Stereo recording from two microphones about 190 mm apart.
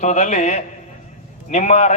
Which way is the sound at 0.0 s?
40° left (ahead or behind).